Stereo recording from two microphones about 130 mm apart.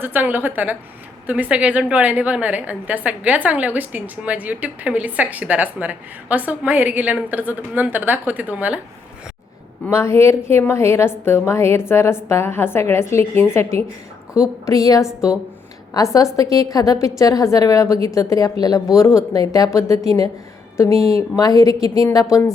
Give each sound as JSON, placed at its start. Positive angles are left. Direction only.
{"t": 0.0, "sound": "a woman's voice", "side_deg": -15}
{"t": 9.8, "sound": "a woman's voice", "side_deg": 20}
{"t": 15.0, "sound": "a woman's voice", "side_deg": -5}
{"t": 16.0, "sound": "a woman's voice", "side_deg": 25}